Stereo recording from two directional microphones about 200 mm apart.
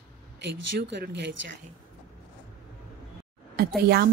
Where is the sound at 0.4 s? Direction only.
60° right (ahead or behind).